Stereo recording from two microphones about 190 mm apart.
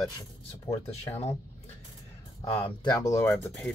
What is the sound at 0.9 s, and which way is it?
Speech, 35° left (ahead or behind).